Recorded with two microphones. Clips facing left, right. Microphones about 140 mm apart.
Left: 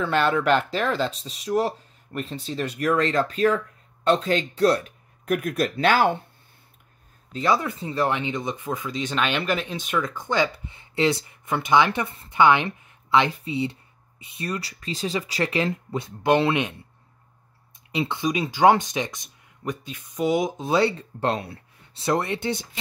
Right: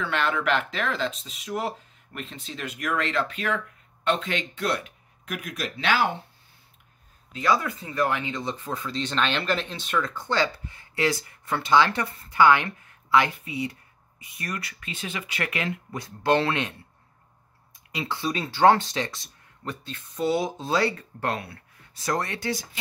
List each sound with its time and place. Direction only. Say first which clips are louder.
0.0 s speech: left 5 dB; 35° left (ahead or behind)
7.3 s speech: left 1 dB; 25° left (ahead or behind)
17.9 s speech: left 4 dB; 20° left (ahead or behind)